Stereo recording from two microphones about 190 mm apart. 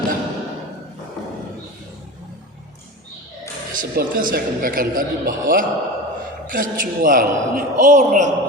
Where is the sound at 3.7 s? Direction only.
45° right (ahead or behind).